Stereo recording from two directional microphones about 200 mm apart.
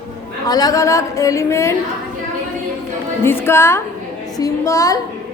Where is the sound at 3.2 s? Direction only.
10° left (ahead or behind).